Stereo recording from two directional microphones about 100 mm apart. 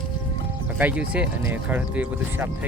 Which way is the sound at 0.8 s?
15° right (ahead or behind).